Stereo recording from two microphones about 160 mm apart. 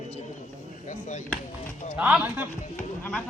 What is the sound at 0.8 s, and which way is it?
Speech, 50° left (ahead or behind).